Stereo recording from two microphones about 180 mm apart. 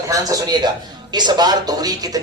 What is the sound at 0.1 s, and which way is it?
A man's voice, 20° right (ahead or behind).